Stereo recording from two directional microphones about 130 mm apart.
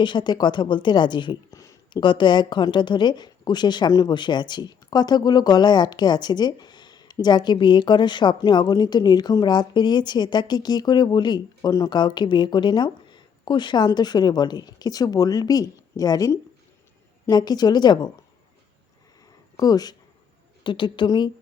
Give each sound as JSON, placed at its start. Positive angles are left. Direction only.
{"t": 0.0, "sound": "speech", "side_deg": 35}
{"t": 19.5, "sound": "speech", "side_deg": 30}